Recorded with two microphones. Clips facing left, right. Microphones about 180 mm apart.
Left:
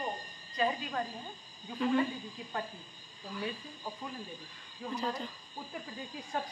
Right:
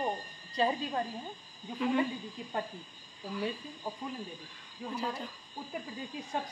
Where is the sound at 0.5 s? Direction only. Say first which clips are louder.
Right 2 dB; 30° right (ahead or behind).